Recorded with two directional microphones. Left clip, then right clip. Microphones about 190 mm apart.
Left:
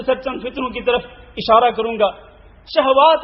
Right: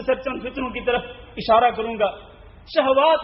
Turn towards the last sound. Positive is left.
turn(degrees=35)  # may be behind; listen again after turning